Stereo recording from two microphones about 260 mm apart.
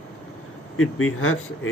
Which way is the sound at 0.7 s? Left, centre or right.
Left.